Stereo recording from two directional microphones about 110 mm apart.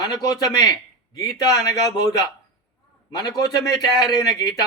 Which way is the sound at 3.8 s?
35° left (ahead or behind).